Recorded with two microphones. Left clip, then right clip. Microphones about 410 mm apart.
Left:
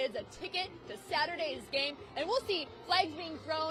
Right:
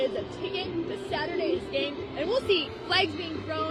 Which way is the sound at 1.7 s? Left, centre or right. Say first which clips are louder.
Right 5 dB; left.